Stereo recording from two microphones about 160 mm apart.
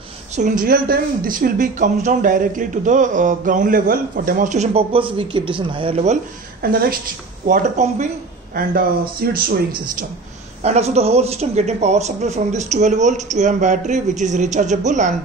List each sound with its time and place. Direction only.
0.4 s speech: 55° right (ahead or behind)
6.6 s speech: 70° right (ahead or behind)
7.4 s speech: 60° right (ahead or behind)
9.2 s speech: 75° right (ahead or behind)
10.6 s speech: 45° right (ahead or behind)